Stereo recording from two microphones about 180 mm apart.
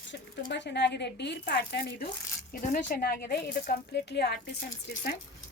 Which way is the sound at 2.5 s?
50° left (ahead or behind).